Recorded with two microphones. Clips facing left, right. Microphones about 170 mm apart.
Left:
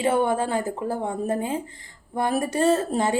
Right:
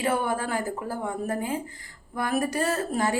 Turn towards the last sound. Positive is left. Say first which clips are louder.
# left 5 dB
turn(degrees=25)  # may be behind; listen again after turning